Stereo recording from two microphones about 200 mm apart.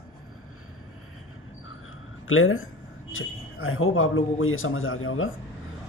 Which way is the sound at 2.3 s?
90° left.